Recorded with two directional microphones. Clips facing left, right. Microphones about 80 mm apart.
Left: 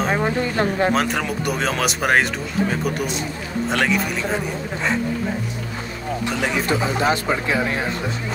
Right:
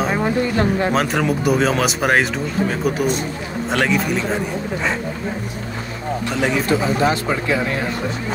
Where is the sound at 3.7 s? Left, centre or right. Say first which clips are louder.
Right 3 dB; centre.